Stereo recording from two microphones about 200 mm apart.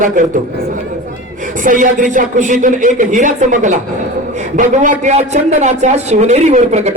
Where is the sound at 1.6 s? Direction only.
40° right (ahead or behind).